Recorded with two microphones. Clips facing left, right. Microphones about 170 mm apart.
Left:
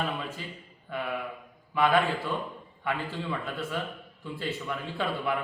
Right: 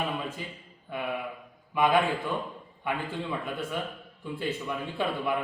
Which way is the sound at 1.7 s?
15° right (ahead or behind).